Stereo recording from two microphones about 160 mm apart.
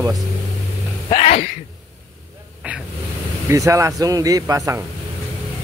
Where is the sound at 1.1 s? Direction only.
40° left (ahead or behind).